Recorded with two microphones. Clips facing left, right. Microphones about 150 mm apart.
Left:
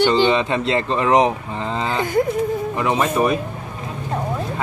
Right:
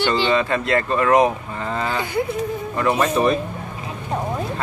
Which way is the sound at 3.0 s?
5° left (ahead or behind).